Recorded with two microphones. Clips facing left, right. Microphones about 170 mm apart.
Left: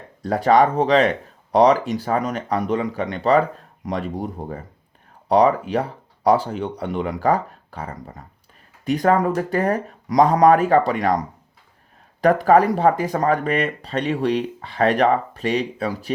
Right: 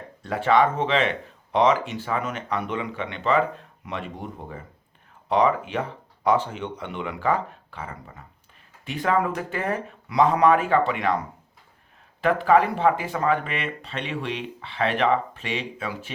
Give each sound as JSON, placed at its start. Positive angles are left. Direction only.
{"t": 0.2, "sound": "speech", "side_deg": 40}